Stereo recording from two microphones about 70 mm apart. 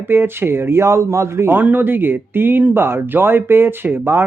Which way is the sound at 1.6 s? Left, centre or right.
Right.